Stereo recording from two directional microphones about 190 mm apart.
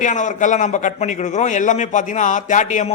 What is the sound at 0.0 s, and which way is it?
A man's voice, 40° left (ahead or behind).